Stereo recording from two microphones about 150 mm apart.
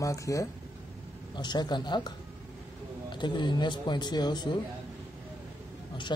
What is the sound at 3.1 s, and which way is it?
Speech, 30° left (ahead or behind).